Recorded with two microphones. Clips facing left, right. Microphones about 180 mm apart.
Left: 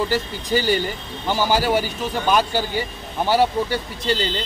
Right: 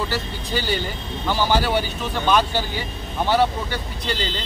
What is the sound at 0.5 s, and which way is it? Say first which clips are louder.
Speech: left 5 dB; 45° left (ahead or behind).